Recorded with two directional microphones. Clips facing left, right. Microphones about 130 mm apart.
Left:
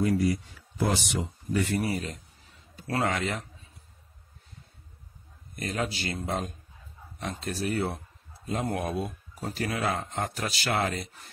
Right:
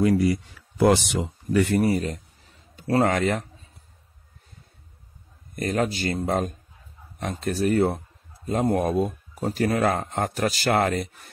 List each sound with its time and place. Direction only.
0.0 s speech: 75° right (ahead or behind)
1.8 s speech: 45° right (ahead or behind)
5.6 s speech: 50° right (ahead or behind)